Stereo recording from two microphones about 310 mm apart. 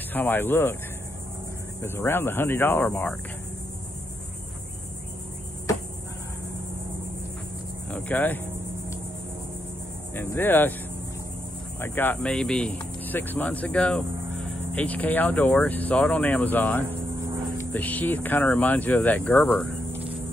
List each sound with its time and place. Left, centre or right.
0.1 s speech: centre
1.8 s speech: centre
7.9 s speech: centre
10.1 s speech: centre
11.8 s speech: centre